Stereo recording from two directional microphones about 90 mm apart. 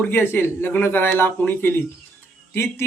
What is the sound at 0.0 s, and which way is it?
Speech, 25° left (ahead or behind).